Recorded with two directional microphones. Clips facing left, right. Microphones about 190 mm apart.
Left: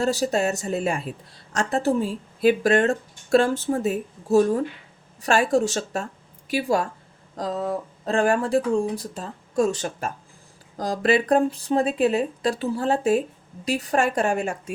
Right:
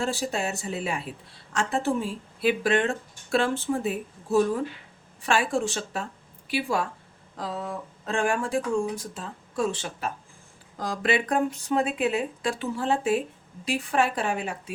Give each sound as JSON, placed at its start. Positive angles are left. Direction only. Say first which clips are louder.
{"t": 0.0, "sound": "a woman's voice", "louder": "left 6 dB", "side_deg": 40}